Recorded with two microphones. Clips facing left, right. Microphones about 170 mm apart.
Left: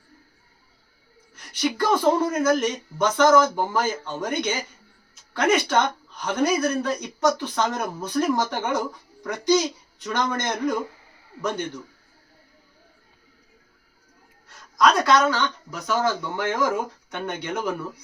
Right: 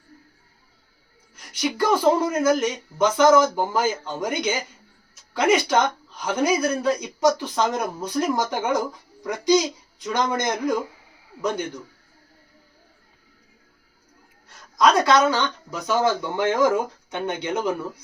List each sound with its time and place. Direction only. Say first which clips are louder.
1.6 s speech: right 1 dB; 10° right (ahead or behind)
14.8 s speech: right 1 dB; 25° right (ahead or behind)